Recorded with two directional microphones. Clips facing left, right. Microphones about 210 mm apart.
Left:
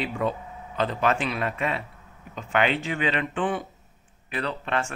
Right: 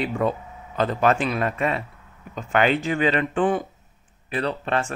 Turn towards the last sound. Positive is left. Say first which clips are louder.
# right 4 dB
turn(degrees=-35)  # may be behind; listen again after turning